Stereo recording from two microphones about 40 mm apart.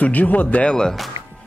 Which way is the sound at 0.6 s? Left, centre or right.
Left.